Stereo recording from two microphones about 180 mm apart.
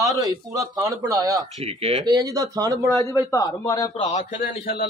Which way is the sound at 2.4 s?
20° right (ahead or behind).